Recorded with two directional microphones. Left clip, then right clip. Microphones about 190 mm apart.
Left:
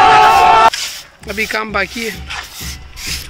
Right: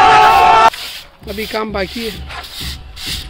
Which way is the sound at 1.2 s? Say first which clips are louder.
Left 3 dB; 10° right (ahead or behind).